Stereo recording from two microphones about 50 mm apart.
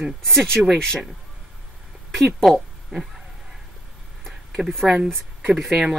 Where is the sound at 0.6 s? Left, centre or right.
Centre.